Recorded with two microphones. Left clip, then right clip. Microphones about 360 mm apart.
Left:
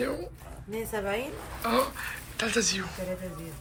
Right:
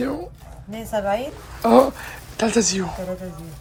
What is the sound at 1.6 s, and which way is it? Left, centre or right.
Speech, centre.